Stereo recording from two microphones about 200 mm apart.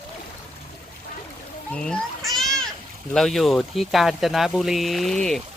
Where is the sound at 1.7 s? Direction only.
5° left (ahead or behind).